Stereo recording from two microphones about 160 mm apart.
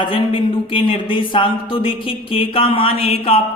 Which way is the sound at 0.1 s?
35° left (ahead or behind).